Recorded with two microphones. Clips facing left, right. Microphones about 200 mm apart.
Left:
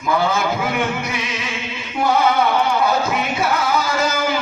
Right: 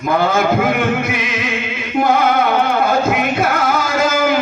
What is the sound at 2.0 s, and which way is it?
Music, 50° right (ahead or behind).